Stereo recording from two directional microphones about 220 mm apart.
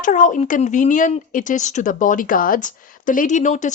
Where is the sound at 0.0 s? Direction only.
35° left (ahead or behind).